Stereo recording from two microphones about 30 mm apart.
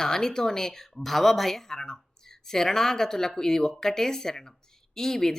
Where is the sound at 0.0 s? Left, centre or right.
Centre.